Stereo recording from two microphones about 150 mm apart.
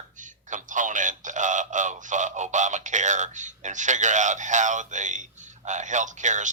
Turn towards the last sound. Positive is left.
turn(degrees=-55)  # may be behind; listen again after turning